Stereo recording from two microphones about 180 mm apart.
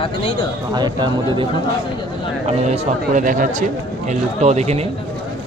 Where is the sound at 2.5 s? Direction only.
40° right (ahead or behind).